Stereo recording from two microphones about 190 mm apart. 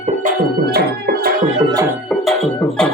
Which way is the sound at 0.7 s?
55° right (ahead or behind).